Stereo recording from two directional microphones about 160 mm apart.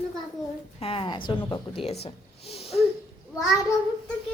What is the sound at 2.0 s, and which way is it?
Gasp, 40° left (ahead or behind).